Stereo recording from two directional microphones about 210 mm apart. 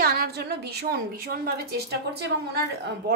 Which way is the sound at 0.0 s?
45° right (ahead or behind).